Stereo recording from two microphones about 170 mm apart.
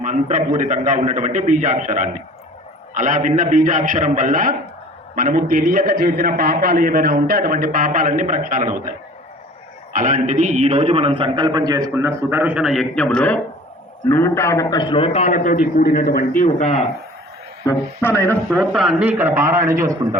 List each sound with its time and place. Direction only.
0.0 s a man's voice: 45° right (ahead or behind)
9.9 s a man's voice: 50° right (ahead or behind); by 15.3 s 35° left (ahead or behind)
15.3 s a man's voice: 55° left (ahead or behind)
18.0 s a man's voice: 15° left (ahead or behind); by 20.1 s 25° right (ahead or behind)